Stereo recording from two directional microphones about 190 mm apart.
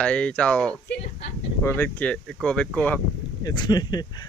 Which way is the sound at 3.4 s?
20° left (ahead or behind).